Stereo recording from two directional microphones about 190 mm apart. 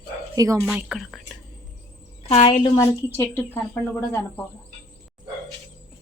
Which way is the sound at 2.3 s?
30° left (ahead or behind).